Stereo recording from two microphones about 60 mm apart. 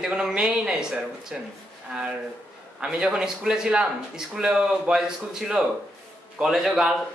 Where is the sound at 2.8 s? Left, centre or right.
Centre.